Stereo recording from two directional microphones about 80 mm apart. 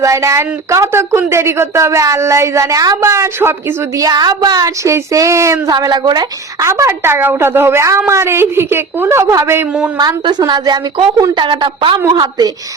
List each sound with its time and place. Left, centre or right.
0.0 s speech: right
3.0 s speech: right
4.1 s speech: right
5.7 s a woman's voice: right
6.6 s speech: right
9.2 s speech: right
10.0 s a woman's voice: right
12.1 s speech: right